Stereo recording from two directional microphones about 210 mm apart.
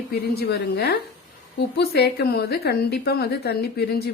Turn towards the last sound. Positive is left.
turn(degrees=50)  # may be behind; listen again after turning